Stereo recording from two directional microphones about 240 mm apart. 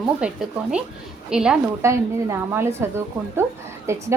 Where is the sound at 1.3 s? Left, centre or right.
Centre.